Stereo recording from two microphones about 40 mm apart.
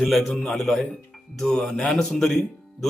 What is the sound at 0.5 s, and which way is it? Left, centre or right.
Mantra, centre.